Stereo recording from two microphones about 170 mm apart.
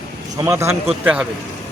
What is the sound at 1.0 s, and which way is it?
Speech, 5° right (ahead or behind).